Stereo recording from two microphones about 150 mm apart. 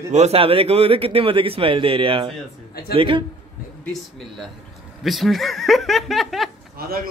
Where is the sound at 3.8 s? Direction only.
Centre (ahead or behind).